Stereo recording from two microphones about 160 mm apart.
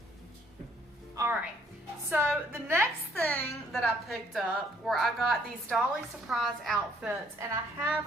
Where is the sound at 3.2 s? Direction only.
10° left (ahead or behind).